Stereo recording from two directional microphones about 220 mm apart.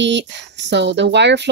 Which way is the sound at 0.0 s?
55° right (ahead or behind).